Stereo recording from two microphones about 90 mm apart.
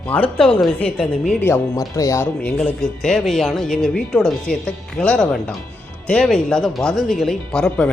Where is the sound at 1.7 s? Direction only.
35° left (ahead or behind).